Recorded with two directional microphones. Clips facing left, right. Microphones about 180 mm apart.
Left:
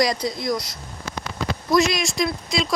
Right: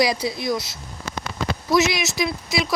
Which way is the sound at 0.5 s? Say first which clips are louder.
Right 1 dB; 25° right (ahead or behind).